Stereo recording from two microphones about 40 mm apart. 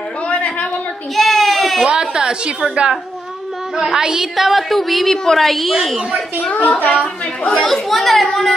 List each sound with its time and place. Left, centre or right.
0.3 s a sound: left
1.1 s baby cry: centre
1.9 s a woman's voice: centre
3.7 s a woman's voice: centre
6.5 s a woman's voice: left
7.5 s a woman's voice: centre
8.3 s a sound: centre